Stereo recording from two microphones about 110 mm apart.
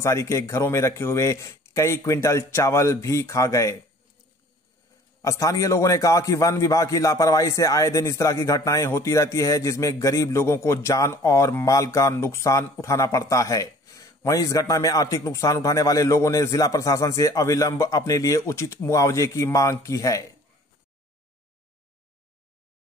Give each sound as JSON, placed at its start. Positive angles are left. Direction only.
{"t": 0.0, "sound": "a man's voice", "side_deg": 25}
{"t": 5.2, "sound": "a man's voice", "side_deg": 30}